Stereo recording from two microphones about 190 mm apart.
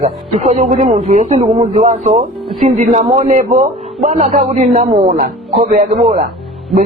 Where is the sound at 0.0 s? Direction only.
35° right (ahead or behind); by 5.6 s 50° right (ahead or behind).